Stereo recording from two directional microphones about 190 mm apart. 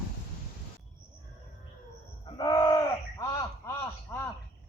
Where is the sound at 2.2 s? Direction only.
25° left (ahead or behind).